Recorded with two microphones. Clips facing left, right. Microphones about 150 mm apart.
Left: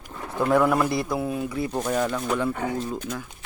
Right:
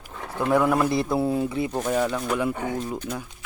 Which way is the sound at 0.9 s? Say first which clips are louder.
Right 3 dB; 25° right (ahead or behind).